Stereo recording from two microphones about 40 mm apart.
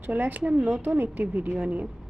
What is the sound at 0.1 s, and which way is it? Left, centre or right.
A woman's voice, right.